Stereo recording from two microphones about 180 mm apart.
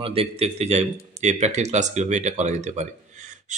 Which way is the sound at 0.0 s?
30° right (ahead or behind).